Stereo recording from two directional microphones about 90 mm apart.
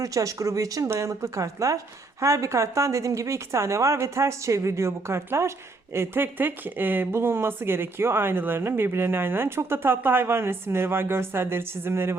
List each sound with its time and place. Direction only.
0.0 s a woman's voice: 40° right (ahead or behind)